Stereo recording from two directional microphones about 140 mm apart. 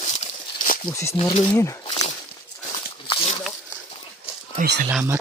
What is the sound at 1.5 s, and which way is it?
Speech, 20° left (ahead or behind).